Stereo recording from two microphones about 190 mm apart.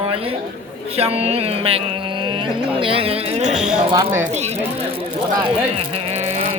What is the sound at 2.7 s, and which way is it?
Speech, 30° right (ahead or behind).